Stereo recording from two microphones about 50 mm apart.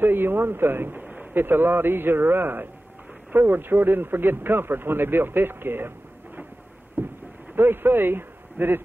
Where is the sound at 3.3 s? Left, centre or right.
Right.